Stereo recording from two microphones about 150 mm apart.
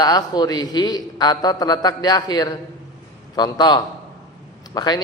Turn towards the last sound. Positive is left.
turn(degrees=25)  # may be behind; listen again after turning